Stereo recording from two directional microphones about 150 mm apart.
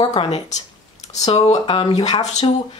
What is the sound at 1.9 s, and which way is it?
Speech, 25° left (ahead or behind).